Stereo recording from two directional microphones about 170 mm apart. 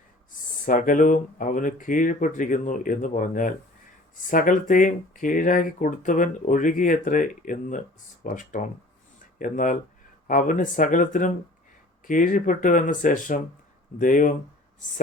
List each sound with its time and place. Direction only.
0.6 s speech: 50° left (ahead or behind)